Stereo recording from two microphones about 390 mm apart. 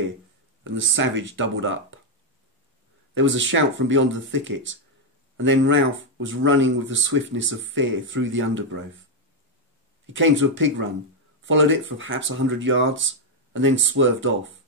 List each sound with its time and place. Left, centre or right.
0.7 s speech: right
3.2 s speech: right
10.1 s speech: right